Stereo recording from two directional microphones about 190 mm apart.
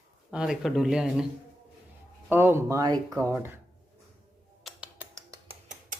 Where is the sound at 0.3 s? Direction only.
5° right (ahead or behind).